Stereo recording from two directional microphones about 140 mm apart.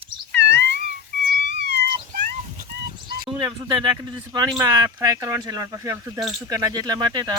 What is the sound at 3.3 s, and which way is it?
Speech, 35° right (ahead or behind).